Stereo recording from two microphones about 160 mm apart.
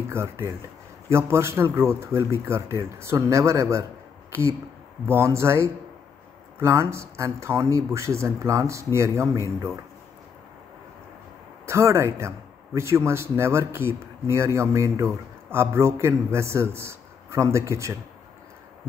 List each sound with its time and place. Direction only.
0.1 s a man's voice: 15° right (ahead or behind)
11.6 s a man's voice: 15° right (ahead or behind)